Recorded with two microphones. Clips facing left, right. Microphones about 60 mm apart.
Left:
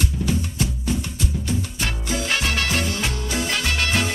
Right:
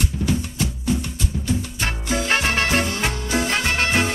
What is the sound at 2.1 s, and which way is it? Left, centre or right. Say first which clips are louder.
Music: right 4 dB; right.